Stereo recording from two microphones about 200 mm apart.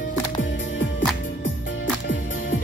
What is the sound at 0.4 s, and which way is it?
Music, 65° left (ahead or behind).